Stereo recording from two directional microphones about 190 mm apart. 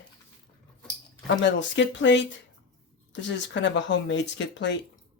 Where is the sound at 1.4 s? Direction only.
75° left (ahead or behind).